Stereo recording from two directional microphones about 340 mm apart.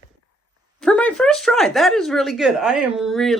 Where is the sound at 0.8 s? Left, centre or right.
Centre.